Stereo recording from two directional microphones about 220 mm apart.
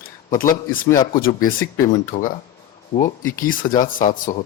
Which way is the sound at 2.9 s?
15° left (ahead or behind).